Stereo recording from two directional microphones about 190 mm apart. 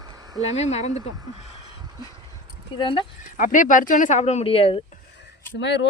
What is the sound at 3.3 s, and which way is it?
Speech, 45° left (ahead or behind).